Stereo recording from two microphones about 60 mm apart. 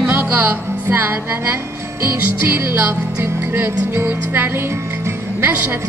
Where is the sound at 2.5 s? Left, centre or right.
Right.